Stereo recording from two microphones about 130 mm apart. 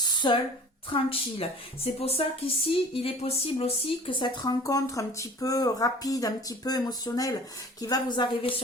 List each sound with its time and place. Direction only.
0.0 s a sound: 35° left (ahead or behind)
0.9 s a woman's voice: 45° left (ahead or behind)
4.4 s a woman's voice: 25° left (ahead or behind)